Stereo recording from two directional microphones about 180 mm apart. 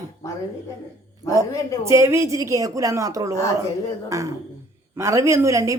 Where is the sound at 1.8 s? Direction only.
15° right (ahead or behind).